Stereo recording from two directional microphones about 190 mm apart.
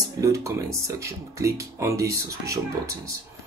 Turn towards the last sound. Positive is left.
turn(degrees=-15)  # may be behind; listen again after turning